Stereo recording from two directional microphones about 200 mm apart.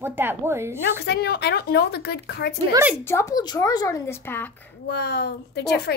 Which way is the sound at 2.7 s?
10° right (ahead or behind).